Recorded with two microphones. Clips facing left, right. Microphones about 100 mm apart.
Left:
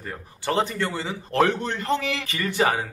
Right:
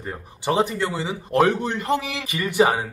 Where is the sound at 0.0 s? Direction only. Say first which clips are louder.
Right 3 dB; 20° right (ahead or behind).